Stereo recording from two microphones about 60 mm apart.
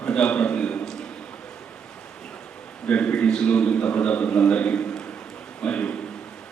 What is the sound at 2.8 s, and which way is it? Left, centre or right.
A man's voice, centre.